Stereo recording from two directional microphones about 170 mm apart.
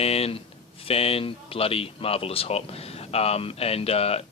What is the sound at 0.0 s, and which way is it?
Speech, 35° left (ahead or behind).